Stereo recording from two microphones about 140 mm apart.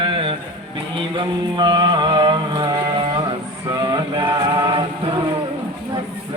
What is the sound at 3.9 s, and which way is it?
Music, 35° right (ahead or behind).